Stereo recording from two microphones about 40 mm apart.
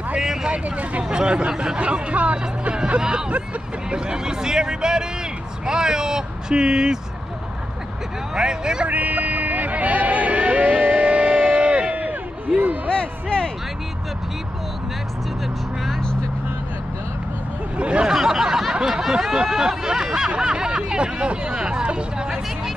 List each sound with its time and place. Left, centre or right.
0.2 s vehicle: centre
0.5 s speech: right
1.0 s speech: right
1.8 s speech: right
8.4 s speech: centre
8.8 s a sound: right
12.9 s music: left
17.7 s speech: right
18.1 s a sound: centre
19.3 s speech: centre